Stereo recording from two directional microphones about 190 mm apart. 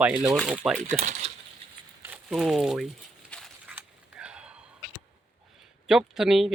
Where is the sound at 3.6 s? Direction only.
5° right (ahead or behind).